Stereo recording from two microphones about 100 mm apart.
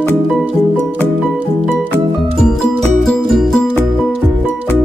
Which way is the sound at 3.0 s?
Centre (ahead or behind).